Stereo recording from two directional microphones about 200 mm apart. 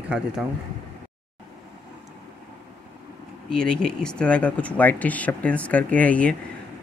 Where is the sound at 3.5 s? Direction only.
5° left (ahead or behind).